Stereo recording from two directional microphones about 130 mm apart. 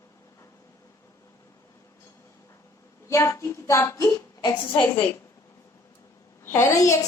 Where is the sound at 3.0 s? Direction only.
20° left (ahead or behind); by 5.1 s 40° left (ahead or behind).